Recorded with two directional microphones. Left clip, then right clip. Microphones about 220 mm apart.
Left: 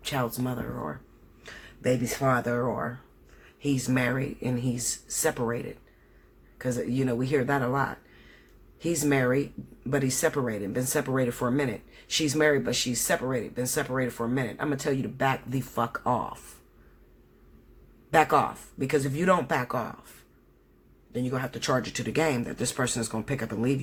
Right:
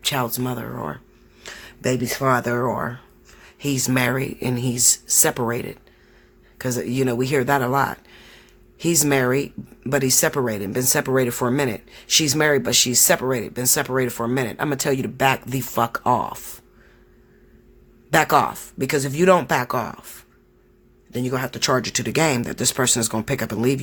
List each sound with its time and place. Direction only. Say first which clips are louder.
0.0 s speech: right 7 dB; 45° right (ahead or behind)
18.1 s speech: right 5 dB; 45° right (ahead or behind)
21.1 s speech: right 6 dB; 45° right (ahead or behind)